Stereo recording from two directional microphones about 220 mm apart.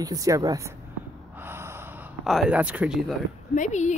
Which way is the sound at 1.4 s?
10° right (ahead or behind).